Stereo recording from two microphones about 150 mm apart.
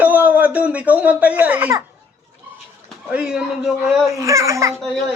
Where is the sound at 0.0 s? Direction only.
10° right (ahead or behind).